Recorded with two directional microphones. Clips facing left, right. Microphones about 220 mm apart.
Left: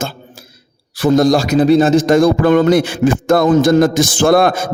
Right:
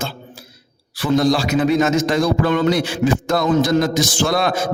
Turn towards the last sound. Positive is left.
turn(degrees=50)  # may be behind; listen again after turning